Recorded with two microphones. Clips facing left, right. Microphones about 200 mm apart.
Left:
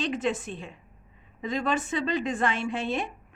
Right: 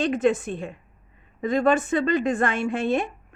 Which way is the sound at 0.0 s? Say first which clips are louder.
Right 7 dB; 50° right (ahead or behind).